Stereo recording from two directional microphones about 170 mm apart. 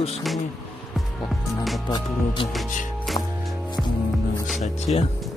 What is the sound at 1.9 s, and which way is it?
Speech, 30° left (ahead or behind).